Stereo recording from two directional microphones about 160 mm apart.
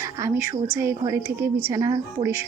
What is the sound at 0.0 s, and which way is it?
A woman's voice, 20° right (ahead or behind).